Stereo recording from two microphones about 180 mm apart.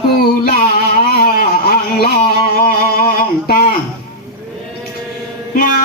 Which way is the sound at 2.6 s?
55° left (ahead or behind).